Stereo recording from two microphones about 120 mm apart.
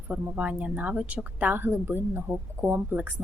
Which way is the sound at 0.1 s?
10° right (ahead or behind).